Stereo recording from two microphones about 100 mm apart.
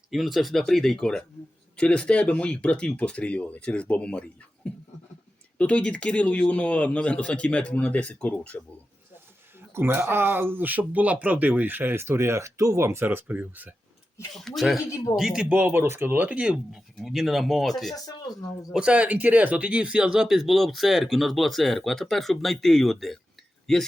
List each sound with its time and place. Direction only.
0.1 s speech: centre (ahead or behind); by 8.7 s 20° left (ahead or behind)
9.7 s speech: 25° right (ahead or behind)
14.3 s speech: centre (ahead or behind)
14.8 s a man's voice: 30° left (ahead or behind)
15.1 s speech: 5° right (ahead or behind)
15.5 s speech: 20° right (ahead or behind); by 17.9 s centre (ahead or behind)
17.9 s speech: 40° left (ahead or behind)
18.7 s speech: 10° right (ahead or behind); by 23.8 s 5° left (ahead or behind)